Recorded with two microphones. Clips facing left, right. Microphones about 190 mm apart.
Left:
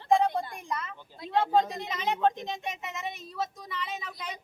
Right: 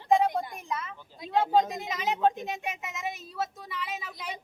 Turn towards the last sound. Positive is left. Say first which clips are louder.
# even
turn(degrees=-5)  # may be behind; listen again after turning